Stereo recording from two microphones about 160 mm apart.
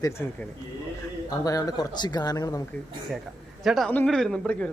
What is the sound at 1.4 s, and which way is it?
Speech, 25° left (ahead or behind).